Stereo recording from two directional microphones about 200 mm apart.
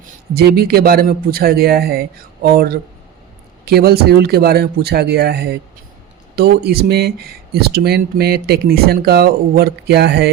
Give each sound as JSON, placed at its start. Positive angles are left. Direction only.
{"t": 0.3, "sound": "speech", "side_deg": -50}